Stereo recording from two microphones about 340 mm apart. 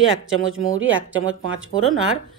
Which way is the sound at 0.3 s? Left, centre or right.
Right.